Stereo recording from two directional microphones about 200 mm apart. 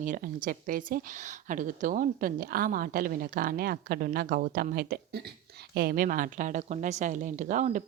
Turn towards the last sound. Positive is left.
turn(degrees=-40)  # may be behind; listen again after turning